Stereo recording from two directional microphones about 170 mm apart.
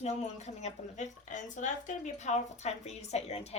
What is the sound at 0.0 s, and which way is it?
A woman's voice, 40° left (ahead or behind).